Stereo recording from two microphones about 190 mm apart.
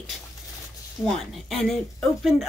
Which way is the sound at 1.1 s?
Centre (ahead or behind).